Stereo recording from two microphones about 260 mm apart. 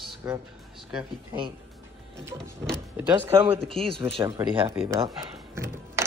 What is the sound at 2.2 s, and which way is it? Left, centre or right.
Speech, centre.